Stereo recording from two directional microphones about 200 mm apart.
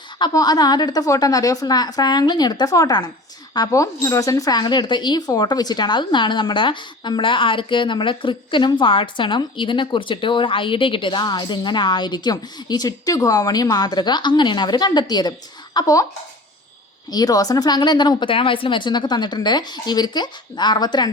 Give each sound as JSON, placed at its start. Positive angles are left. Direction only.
{"t": 0.2, "sound": "speech", "side_deg": 20}
{"t": 17.1, "sound": "speech", "side_deg": 20}